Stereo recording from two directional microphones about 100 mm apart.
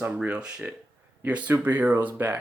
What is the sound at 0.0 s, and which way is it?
Speech, 10° right (ahead or behind).